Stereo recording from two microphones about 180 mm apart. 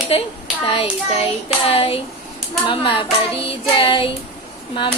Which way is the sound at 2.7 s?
30° left (ahead or behind).